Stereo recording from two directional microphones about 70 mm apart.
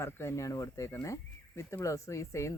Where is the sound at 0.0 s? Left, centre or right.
Left.